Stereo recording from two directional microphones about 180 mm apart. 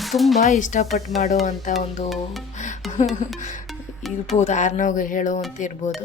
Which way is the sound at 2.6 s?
40° left (ahead or behind).